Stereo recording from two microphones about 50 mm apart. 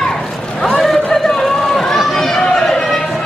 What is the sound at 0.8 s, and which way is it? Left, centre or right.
Chatter, centre.